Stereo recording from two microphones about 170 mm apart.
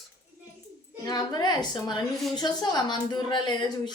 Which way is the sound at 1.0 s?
25° left (ahead or behind).